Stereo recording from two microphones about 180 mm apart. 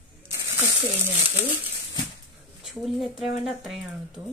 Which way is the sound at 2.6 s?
Centre (ahead or behind).